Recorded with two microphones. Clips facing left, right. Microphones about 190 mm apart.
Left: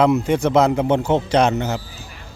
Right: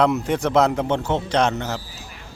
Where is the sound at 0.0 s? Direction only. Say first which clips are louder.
Left 3 dB; centre (ahead or behind).